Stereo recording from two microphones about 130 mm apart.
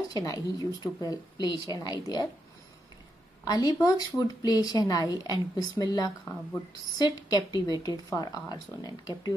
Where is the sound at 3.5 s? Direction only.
30° left (ahead or behind).